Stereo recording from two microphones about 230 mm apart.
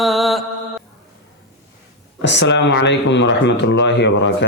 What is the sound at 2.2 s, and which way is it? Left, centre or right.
Speech, left.